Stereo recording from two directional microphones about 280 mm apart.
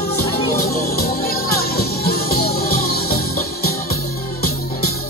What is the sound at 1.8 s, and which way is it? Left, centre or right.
Music, left.